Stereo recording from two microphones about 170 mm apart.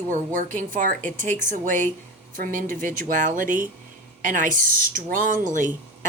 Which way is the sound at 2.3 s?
50° right (ahead or behind).